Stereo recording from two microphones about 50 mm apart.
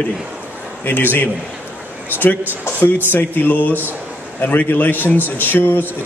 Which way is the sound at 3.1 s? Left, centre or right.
Left.